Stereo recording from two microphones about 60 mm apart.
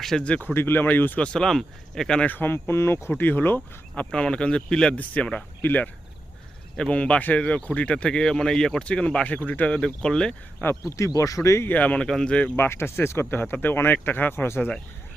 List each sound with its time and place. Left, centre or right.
0.0 s speech: centre
0.3 s speech: left
1.2 s speech: centre
2.2 s speech: left
3.9 s speech: centre
9.7 s speech: centre
10.8 s speech: left
11.7 s speech: left
12.0 s speech: centre
12.5 s speech: left